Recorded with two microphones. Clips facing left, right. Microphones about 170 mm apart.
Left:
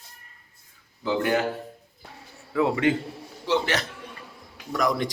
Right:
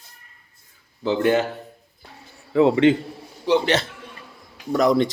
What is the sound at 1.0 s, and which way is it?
Speech, 25° right (ahead or behind).